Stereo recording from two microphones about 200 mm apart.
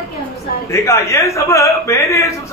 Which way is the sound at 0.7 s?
15° left (ahead or behind).